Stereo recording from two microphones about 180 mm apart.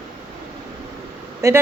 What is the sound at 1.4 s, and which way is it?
Speech, 15° right (ahead or behind).